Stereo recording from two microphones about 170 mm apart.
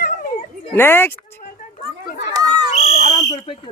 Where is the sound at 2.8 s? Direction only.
40° left (ahead or behind).